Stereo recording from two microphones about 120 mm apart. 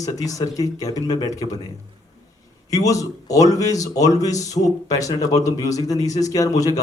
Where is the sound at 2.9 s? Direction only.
30° left (ahead or behind).